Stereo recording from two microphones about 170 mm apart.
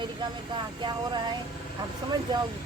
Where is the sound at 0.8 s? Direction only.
25° right (ahead or behind).